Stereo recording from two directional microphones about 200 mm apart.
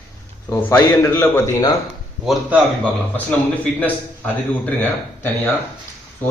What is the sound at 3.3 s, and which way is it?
A man's voice, 5° left (ahead or behind).